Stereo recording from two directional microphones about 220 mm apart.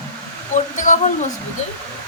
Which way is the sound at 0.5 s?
35° left (ahead or behind).